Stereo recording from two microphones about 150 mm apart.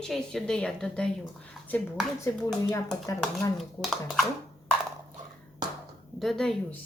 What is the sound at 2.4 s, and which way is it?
Speech, 20° left (ahead or behind).